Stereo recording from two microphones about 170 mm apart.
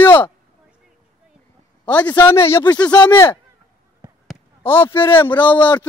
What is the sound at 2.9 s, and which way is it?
Speech, 20° left (ahead or behind).